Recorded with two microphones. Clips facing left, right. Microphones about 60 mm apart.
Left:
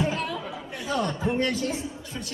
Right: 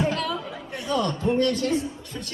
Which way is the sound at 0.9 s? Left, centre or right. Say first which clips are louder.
Right 3 dB; right.